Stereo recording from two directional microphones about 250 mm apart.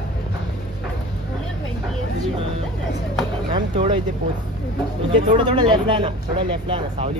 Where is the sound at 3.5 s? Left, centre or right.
Centre.